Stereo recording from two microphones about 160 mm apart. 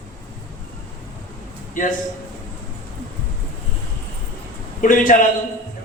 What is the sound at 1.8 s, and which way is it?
Speech, 55° left (ahead or behind).